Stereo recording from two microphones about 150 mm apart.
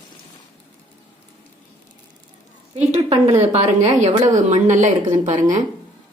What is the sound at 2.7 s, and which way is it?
A woman's voice, 45° right (ahead or behind).